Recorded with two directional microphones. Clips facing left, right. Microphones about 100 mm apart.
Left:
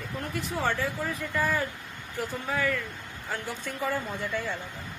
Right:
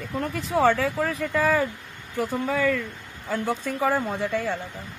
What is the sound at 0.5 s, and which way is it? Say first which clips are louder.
Speech: right 9 dB; 90° right.